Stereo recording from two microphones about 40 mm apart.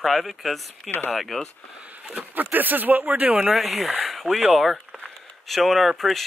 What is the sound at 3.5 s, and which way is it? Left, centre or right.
Speech, centre.